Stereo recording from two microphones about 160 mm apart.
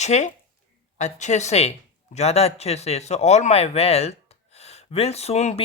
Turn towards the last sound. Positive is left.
turn(degrees=40)  # may be behind; listen again after turning